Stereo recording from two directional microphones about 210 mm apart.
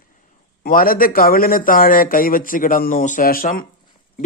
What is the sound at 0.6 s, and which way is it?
A man's voice, 45° left (ahead or behind).